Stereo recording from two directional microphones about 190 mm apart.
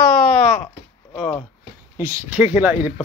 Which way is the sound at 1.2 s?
5° left (ahead or behind).